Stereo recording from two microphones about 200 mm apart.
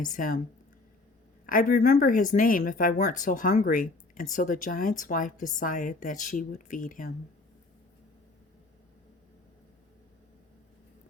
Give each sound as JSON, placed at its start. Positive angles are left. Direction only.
{"t": 1.5, "sound": "speech", "side_deg": 45}